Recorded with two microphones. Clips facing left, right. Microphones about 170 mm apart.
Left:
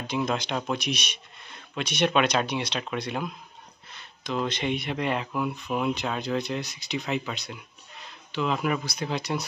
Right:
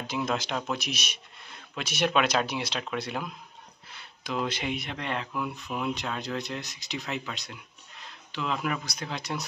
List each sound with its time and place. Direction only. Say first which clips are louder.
0.0 s speech: left 2 dB; 5° right (ahead or behind)
4.9 s speech: left 5 dB; 5° left (ahead or behind)